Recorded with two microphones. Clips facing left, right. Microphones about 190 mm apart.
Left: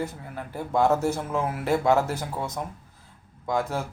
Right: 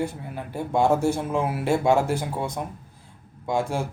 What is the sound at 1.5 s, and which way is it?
Speech, 25° right (ahead or behind).